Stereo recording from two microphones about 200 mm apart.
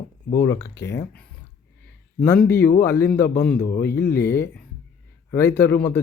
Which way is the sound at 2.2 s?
10° left (ahead or behind).